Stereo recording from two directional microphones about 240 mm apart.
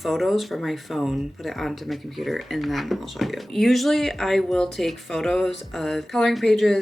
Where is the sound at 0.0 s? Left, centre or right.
Centre.